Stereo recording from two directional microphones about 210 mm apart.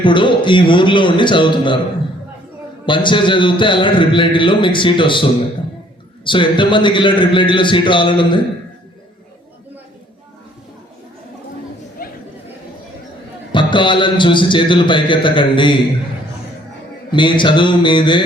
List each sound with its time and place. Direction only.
0.0 s a man's voice: 25° left (ahead or behind)
2.8 s a man's voice: 20° left (ahead or behind)
6.2 s a man's voice: 25° left (ahead or behind)
12.0 s chatter: 45° left (ahead or behind)
13.5 s a man's voice: 20° left (ahead or behind)
17.1 s a man's voice: 20° left (ahead or behind)